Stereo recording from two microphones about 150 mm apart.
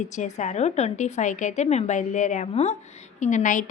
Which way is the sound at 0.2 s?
50° left (ahead or behind).